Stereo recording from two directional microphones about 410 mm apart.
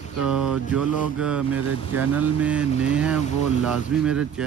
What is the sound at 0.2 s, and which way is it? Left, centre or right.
Speech, centre.